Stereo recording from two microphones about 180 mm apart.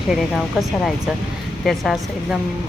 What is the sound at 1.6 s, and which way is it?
Speech, centre (ahead or behind).